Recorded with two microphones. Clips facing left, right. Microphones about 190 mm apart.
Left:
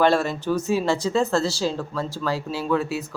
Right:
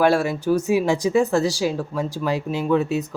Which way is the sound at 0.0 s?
10° right (ahead or behind).